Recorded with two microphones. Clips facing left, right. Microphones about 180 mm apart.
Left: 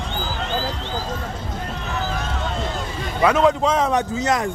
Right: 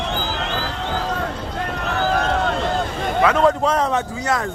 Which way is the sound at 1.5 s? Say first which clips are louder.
Right 5 dB; 70° right (ahead or behind).